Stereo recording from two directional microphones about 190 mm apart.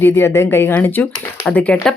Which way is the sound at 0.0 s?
10° left (ahead or behind).